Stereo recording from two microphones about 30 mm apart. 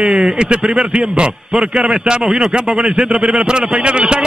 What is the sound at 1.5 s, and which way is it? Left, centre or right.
A man's voice, right.